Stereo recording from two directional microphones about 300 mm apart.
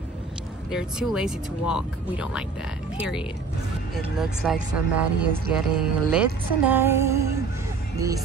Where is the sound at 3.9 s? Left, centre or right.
Centre.